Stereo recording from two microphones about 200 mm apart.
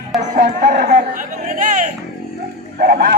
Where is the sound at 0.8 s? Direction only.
40° right (ahead or behind).